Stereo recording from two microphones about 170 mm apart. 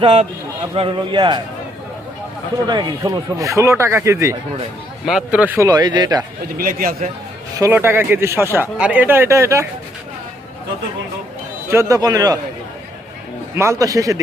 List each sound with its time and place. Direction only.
0.0 s a man's voice: 35° right (ahead or behind)
2.6 s speech: 25° right (ahead or behind)
5.0 s speech: 5° right (ahead or behind); by 6.2 s 25° right (ahead or behind)
6.6 s a man's voice: 55° right (ahead or behind)
7.6 s speech: 15° right (ahead or behind)
11.7 s speech: 20° right (ahead or behind)
13.6 s speech: 20° right (ahead or behind)